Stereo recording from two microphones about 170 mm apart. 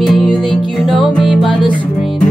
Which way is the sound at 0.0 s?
Centre (ahead or behind).